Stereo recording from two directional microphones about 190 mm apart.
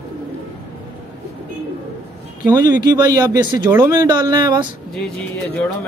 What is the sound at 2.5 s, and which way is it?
Speech, 20° right (ahead or behind).